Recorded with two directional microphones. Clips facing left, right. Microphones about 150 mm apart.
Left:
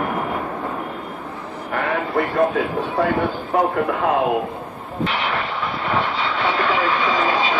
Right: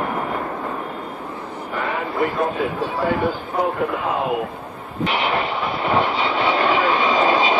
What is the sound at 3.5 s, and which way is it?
Speech, 70° left (ahead or behind).